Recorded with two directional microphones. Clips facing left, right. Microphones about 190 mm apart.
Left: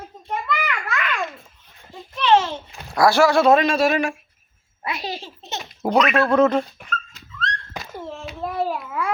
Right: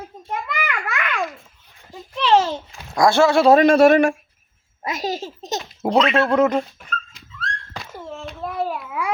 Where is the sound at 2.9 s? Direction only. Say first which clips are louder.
Right 1 dB; 25° right (ahead or behind).